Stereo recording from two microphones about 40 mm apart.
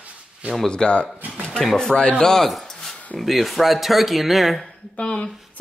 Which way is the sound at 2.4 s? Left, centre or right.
Centre.